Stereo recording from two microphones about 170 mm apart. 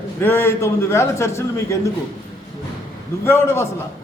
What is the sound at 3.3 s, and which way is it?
Speech, 15° left (ahead or behind).